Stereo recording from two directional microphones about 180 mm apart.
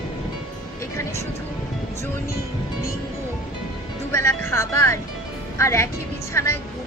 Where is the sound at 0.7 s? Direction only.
15° left (ahead or behind).